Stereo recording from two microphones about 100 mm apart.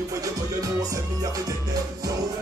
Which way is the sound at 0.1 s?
35° right (ahead or behind).